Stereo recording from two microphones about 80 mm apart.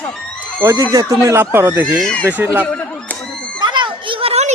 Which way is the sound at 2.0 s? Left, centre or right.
Centre.